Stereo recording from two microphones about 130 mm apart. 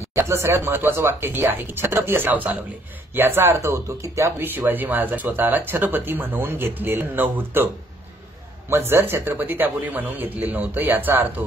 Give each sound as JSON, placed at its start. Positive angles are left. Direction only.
{"t": 0.1, "sound": "speech", "side_deg": -20}